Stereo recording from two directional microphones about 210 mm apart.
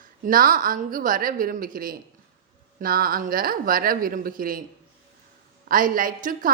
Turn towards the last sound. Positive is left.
turn(degrees=-40)  # may be behind; listen again after turning